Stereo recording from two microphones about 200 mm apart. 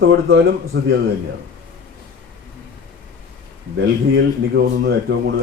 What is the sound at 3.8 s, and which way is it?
Speech, 60° right (ahead or behind).